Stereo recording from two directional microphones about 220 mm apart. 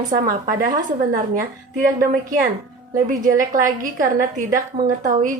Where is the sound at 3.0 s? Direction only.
35° right (ahead or behind).